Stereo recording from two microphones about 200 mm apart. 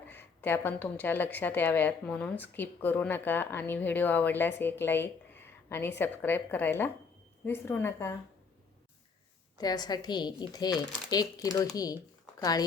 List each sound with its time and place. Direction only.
0.1 s a woman's voice: 10° left (ahead or behind)
9.6 s speech: 20° left (ahead or behind)